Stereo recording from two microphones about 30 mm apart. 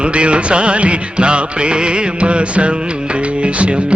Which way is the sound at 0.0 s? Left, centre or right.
Right.